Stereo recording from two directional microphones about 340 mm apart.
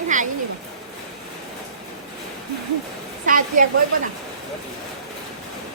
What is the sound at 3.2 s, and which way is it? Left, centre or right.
Speech, right.